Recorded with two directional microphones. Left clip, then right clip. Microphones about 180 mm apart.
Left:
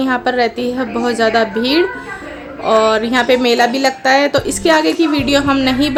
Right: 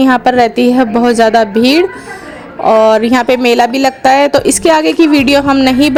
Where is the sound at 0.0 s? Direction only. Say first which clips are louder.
Right 7 dB; 40° right (ahead or behind).